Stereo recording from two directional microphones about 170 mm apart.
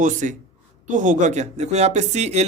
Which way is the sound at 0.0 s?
50° right (ahead or behind).